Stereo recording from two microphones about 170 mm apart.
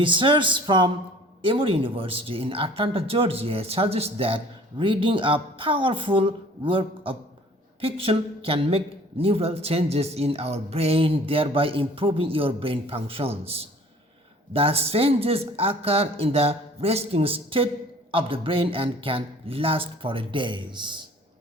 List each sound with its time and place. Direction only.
0.0 s a man's voice: 30° right (ahead or behind)
14.5 s a man's voice: 35° right (ahead or behind)